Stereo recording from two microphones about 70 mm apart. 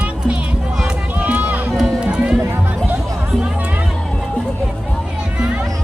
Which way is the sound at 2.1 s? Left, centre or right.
Centre.